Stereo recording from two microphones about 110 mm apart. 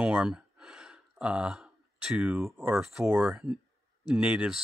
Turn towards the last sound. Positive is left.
turn(degrees=-10)  # may be behind; listen again after turning